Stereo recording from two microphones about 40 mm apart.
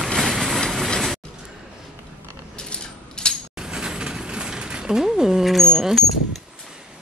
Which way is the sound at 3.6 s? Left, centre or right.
Centre.